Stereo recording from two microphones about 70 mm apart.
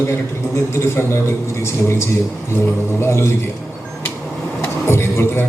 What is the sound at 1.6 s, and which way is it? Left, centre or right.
A man's voice, left.